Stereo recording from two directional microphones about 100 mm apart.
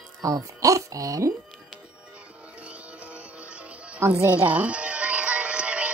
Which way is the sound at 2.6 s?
10° right (ahead or behind).